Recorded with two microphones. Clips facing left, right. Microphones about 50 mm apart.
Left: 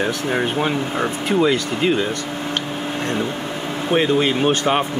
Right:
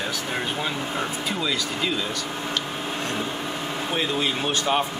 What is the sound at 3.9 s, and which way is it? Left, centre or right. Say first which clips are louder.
Speech: left 9 dB; left.